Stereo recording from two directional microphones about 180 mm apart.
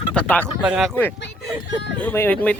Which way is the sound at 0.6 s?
5° right (ahead or behind).